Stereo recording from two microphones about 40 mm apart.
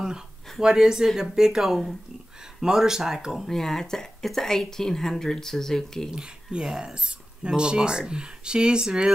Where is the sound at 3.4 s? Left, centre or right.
Centre.